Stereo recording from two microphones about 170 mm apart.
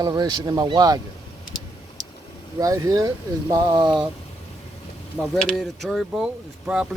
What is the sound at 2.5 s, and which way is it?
Speech, 20° right (ahead or behind).